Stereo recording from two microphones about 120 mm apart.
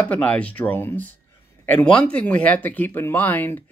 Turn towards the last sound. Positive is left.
turn(degrees=15)  # may be behind; listen again after turning